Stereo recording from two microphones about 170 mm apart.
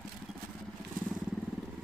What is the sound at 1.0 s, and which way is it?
Vehicle, 55° right (ahead or behind).